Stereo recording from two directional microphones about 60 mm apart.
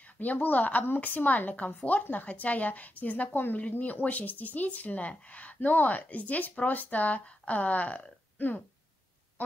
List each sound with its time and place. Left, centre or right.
0.0 s speech: left